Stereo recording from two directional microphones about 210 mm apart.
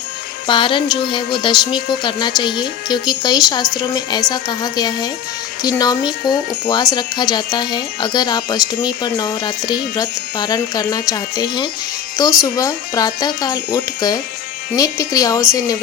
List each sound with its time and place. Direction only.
0.4 s speech: 25° left (ahead or behind)